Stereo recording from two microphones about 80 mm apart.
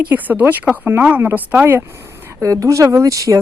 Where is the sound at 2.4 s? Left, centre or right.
Right.